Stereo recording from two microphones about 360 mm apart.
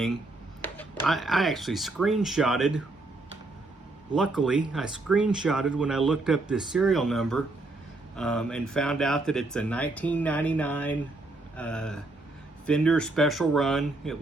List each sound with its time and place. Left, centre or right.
0.6 s speech: centre
4.1 s speech: centre